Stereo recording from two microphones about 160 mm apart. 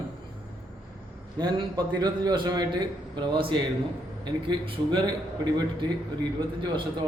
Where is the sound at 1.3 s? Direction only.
25° right (ahead or behind).